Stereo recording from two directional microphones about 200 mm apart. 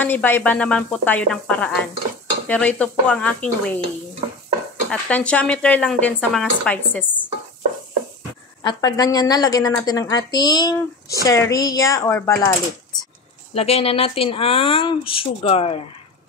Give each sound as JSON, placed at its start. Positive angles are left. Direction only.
{"t": 0.0, "sound": "speech", "side_deg": 10}
{"t": 4.8, "sound": "speech", "side_deg": 5}
{"t": 8.6, "sound": "speech", "side_deg": 20}
{"t": 13.6, "sound": "speech", "side_deg": 30}